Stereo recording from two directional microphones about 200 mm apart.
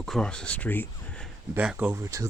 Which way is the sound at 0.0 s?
5° left (ahead or behind).